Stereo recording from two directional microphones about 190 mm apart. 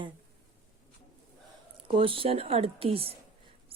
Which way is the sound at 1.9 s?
25° right (ahead or behind).